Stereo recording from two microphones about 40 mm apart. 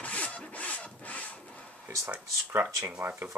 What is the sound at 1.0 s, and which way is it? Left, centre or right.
Rub, left.